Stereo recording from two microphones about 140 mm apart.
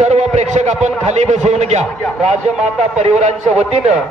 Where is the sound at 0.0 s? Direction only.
55° right (ahead or behind).